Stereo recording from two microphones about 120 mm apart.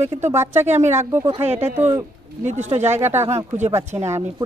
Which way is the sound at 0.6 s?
75° right (ahead or behind).